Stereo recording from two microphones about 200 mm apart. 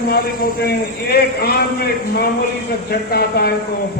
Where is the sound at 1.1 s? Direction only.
50° left (ahead or behind).